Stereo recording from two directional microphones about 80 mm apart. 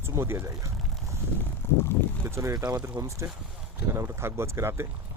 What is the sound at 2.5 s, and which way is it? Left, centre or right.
Speech, right.